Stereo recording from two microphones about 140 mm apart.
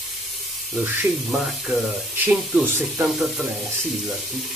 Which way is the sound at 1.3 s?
Centre (ahead or behind).